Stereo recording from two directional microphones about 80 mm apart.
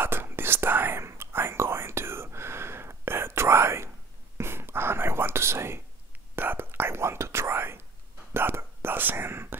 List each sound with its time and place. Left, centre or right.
0.0 s whispering: right